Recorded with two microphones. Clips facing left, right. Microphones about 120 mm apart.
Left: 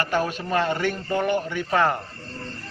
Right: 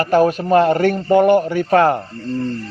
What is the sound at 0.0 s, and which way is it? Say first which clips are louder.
A man's voice: right 10 dB; 45° right (ahead or behind).